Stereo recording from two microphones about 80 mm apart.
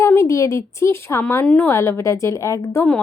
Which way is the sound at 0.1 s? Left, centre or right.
Left.